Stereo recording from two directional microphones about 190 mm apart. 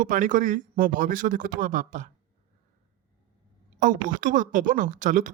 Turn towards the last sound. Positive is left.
turn(degrees=-40)  # may be behind; listen again after turning